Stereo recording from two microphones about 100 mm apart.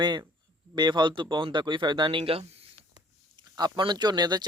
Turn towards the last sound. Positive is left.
turn(degrees=-45)  # may be behind; listen again after turning